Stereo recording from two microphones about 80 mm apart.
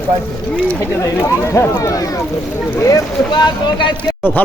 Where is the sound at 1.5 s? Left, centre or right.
Left.